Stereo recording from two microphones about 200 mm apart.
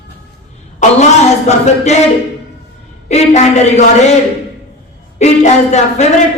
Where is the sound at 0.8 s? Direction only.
35° left (ahead or behind).